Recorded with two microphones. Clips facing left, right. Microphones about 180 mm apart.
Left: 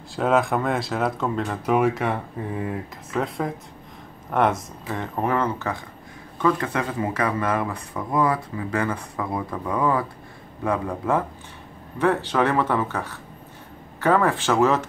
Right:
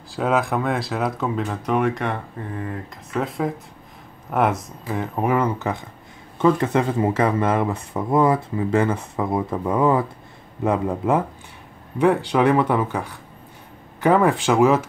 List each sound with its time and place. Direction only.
0.1 s speech: centre (ahead or behind)